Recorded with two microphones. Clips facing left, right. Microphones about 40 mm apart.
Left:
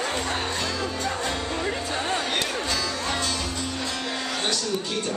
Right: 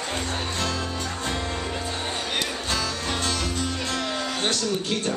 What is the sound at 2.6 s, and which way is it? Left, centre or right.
Music, right.